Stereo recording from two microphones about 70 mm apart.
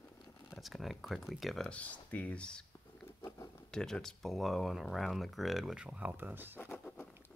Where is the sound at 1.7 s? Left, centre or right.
Left; by 5.9 s centre.